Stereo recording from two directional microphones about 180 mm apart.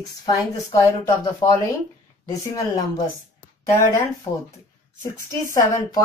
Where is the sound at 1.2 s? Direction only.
20° left (ahead or behind).